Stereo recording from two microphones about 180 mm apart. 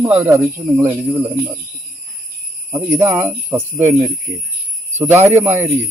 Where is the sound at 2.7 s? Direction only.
15° right (ahead or behind).